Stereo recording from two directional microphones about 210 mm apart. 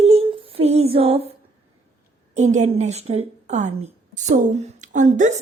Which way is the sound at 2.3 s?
35° right (ahead or behind).